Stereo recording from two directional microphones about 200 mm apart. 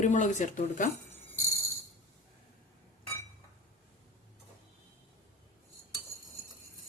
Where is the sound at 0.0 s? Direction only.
40° left (ahead or behind).